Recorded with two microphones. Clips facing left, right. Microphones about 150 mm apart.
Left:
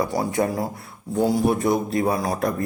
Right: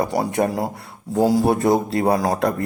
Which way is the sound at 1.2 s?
90° right.